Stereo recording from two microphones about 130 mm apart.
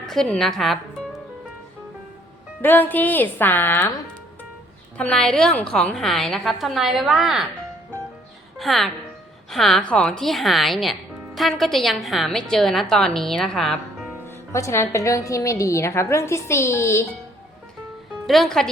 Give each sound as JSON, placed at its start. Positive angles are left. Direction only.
{"t": 0.0, "sound": "speech", "side_deg": 5}
{"t": 2.6, "sound": "speech", "side_deg": 15}
{"t": 4.9, "sound": "a woman's voice", "side_deg": 5}
{"t": 8.5, "sound": "a woman's voice", "side_deg": 0}
{"t": 14.3, "sound": "a woman's voice", "side_deg": 20}
{"t": 18.3, "sound": "a woman's voice", "side_deg": 0}